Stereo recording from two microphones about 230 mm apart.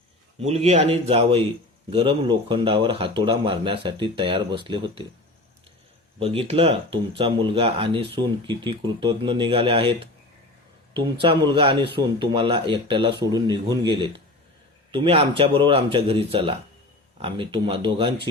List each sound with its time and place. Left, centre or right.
0.3 s speech: right
6.1 s speech: right
10.9 s speech: right